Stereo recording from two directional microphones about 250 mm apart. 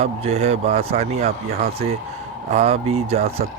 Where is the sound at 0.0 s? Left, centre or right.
Right.